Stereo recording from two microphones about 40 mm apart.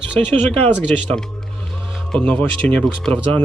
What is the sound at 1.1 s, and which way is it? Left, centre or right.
Music, centre.